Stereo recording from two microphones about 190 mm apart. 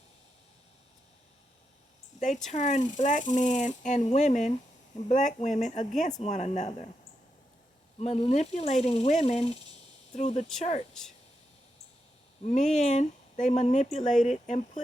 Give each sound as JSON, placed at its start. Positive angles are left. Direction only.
{"t": 2.1, "sound": "speech", "side_deg": 40}
{"t": 7.9, "sound": "speech", "side_deg": 35}
{"t": 12.5, "sound": "speech", "side_deg": 40}